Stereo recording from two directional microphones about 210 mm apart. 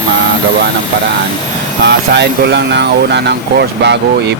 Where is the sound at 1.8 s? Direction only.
55° right (ahead or behind).